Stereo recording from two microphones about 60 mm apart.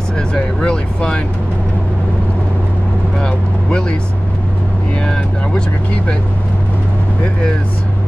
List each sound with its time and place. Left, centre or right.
0.3 s speech: centre
3.2 s speech: centre
5.0 s speech: centre